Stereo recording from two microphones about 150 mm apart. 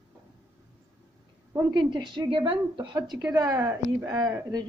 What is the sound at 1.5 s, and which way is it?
A woman's voice, 25° right (ahead or behind).